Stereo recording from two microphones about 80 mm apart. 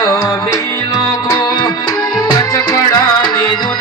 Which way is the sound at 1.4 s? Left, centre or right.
Left.